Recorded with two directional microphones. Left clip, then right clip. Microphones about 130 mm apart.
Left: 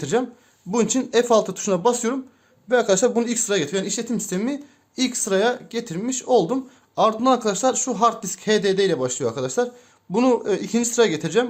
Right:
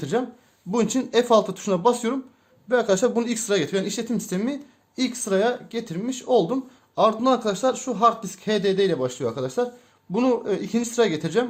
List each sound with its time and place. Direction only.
0.0 s a man's voice: 25° left (ahead or behind)
0.7 s a man's voice: 15° left (ahead or behind)